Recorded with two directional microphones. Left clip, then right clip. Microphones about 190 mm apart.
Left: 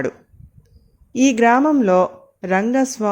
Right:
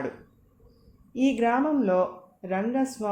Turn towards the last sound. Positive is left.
turn(degrees=50)  # may be behind; listen again after turning